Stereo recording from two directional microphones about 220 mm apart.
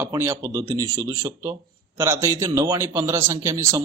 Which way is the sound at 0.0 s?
10° right (ahead or behind).